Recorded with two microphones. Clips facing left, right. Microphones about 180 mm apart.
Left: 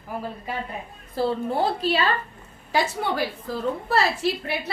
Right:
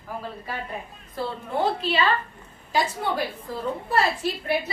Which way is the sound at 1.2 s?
35° left (ahead or behind).